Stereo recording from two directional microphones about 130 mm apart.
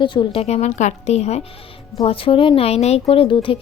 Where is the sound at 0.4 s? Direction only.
60° left (ahead or behind).